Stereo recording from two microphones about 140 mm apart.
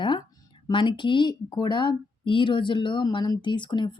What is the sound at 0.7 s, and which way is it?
A woman's voice, 35° left (ahead or behind).